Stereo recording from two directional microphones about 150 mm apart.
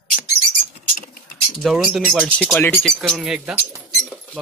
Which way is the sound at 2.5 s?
15° left (ahead or behind).